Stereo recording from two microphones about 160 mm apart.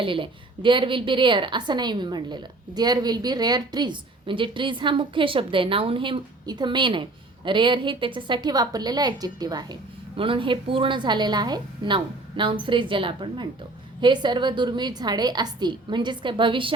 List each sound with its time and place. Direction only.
0.0 s a woman's voice: 30° right (ahead or behind)